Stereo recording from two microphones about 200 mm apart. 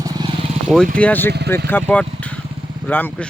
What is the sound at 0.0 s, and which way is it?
Vehicle, 20° right (ahead or behind).